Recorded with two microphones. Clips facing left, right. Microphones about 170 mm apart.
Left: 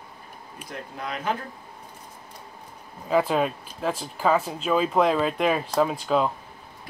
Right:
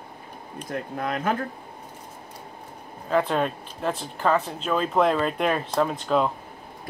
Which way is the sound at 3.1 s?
5° left (ahead or behind).